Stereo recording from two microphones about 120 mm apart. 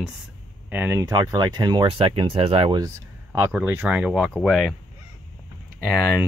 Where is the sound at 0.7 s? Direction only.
15° right (ahead or behind).